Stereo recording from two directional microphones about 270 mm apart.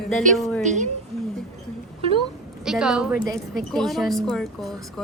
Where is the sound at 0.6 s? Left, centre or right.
Right.